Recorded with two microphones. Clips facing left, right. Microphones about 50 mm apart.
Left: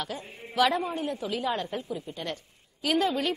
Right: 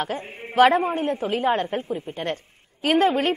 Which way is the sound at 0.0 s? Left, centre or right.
Right.